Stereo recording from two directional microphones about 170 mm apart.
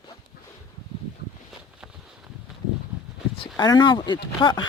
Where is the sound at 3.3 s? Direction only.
25° left (ahead or behind).